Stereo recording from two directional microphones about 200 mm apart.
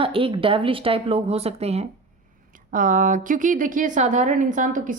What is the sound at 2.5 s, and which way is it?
A woman's voice, 40° right (ahead or behind).